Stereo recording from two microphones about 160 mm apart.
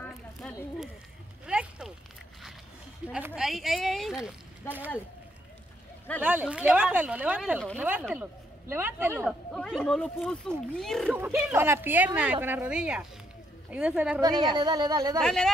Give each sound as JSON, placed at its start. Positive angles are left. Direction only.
{"t": 0.0, "sound": "a sound", "side_deg": 10}
{"t": 1.4, "sound": "a sound", "side_deg": -5}
{"t": 3.1, "sound": "speech", "side_deg": -5}
{"t": 6.2, "sound": "speech", "side_deg": -10}
{"t": 9.2, "sound": "speech", "side_deg": 5}
{"t": 11.1, "sound": "speech", "side_deg": -15}
{"t": 14.2, "sound": "speech", "side_deg": -25}
{"t": 15.1, "sound": "speech", "side_deg": 5}